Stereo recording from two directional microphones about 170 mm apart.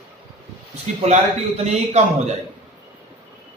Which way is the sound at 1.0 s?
40° right (ahead or behind).